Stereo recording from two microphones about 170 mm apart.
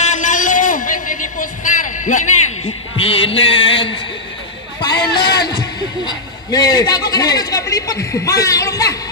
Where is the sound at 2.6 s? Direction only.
35° left (ahead or behind).